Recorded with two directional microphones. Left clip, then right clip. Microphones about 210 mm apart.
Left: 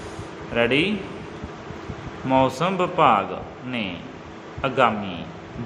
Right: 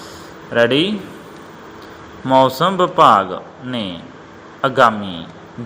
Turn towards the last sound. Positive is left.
turn(degrees=-25)  # may be behind; listen again after turning